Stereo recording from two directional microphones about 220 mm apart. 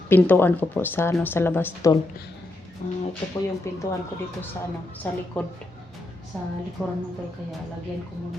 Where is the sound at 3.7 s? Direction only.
15° left (ahead or behind).